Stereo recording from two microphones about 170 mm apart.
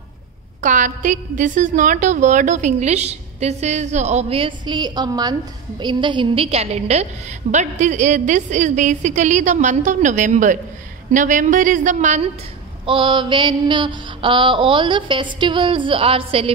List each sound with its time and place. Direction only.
0.6 s a woman's voice: 50° right (ahead or behind)
12.8 s mantra: 30° right (ahead or behind)